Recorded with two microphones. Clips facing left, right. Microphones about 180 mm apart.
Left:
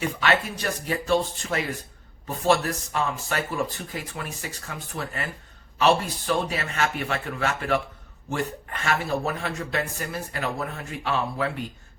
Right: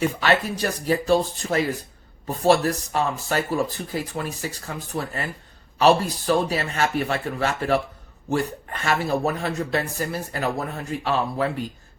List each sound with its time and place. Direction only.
0.2 s speech: 35° right (ahead or behind)